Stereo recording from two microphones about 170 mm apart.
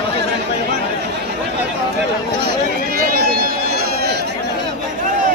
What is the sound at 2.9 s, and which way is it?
Run, 60° right (ahead or behind).